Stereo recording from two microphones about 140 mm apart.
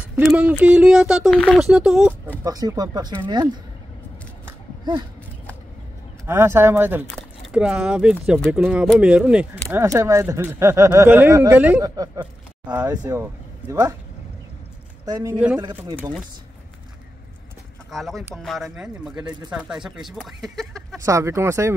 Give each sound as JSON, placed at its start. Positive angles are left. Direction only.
{"t": 0.2, "sound": "speech", "side_deg": -5}
{"t": 2.4, "sound": "speech", "side_deg": -25}
{"t": 6.2, "sound": "speech", "side_deg": -20}
{"t": 11.8, "sound": "speech", "side_deg": -25}
{"t": 15.0, "sound": "speech", "side_deg": -30}
{"t": 15.3, "sound": "speech", "side_deg": -10}
{"t": 17.9, "sound": "speech", "side_deg": 0}
{"t": 21.0, "sound": "speech", "side_deg": -20}